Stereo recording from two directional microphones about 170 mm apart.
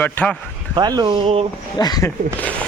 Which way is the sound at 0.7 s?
25° right (ahead or behind).